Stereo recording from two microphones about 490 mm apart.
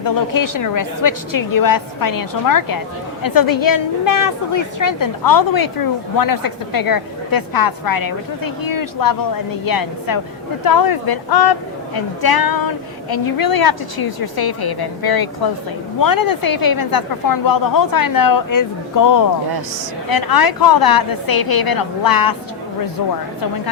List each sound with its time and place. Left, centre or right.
0.0 s a woman's voice: left